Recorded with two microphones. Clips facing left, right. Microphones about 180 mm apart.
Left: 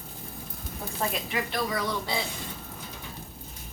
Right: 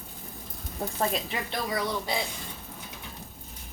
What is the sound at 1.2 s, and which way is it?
Speech, 30° right (ahead or behind).